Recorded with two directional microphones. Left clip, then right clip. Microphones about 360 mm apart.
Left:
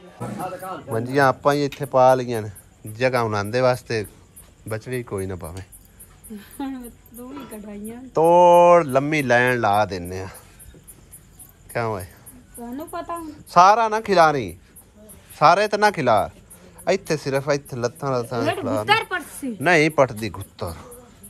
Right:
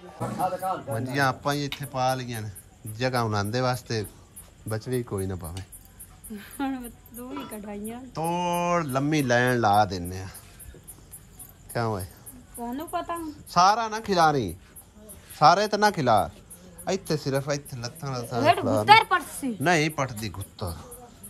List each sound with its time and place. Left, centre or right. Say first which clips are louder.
0.9 s speech: left 10 dB; centre
6.3 s speech: even; centre
11.7 s speech: left 4 dB; centre
12.5 s speech: even; centre
18.4 s speech: right 1 dB; right
19.2 s speech: left 4 dB; centre